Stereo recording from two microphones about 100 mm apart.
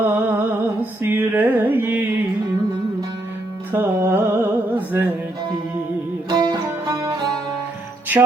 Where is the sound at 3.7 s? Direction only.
20° right (ahead or behind).